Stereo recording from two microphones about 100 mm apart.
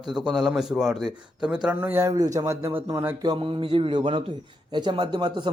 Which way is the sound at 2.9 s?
20° right (ahead or behind).